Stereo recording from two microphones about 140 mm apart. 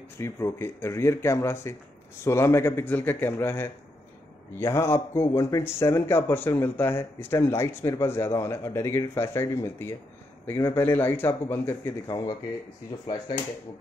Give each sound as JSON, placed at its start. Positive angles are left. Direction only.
{"t": 0.2, "sound": "a man's voice", "side_deg": 20}
{"t": 12.9, "sound": "speech", "side_deg": 25}